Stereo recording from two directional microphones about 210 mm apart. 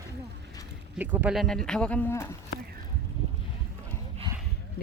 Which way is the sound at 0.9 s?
10° right (ahead or behind).